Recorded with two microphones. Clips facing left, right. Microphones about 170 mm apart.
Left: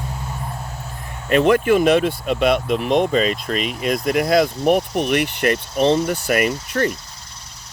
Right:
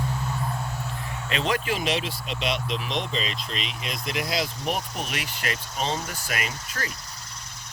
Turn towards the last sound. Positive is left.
turn(degrees=55)  # may be behind; listen again after turning